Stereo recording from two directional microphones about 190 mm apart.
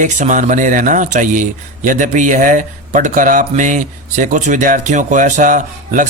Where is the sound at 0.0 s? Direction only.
40° right (ahead or behind).